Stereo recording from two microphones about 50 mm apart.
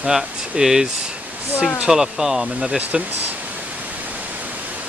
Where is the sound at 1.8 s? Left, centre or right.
Centre.